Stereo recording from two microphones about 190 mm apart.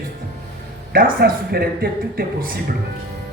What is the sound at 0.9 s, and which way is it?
Speech, 55° right (ahead or behind).